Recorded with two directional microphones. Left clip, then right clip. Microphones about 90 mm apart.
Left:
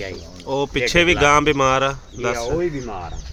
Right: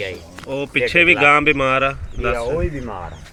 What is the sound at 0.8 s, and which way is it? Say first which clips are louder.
Speech: right 3 dB; 35° left (ahead or behind).